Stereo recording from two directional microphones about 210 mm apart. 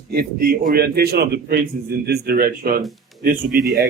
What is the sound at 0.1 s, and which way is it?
Speech, 45° right (ahead or behind).